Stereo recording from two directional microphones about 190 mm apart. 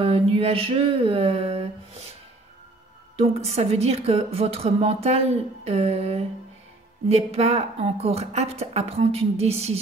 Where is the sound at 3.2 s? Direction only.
35° right (ahead or behind).